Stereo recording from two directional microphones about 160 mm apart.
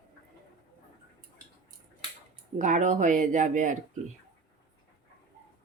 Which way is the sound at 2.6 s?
50° right (ahead or behind).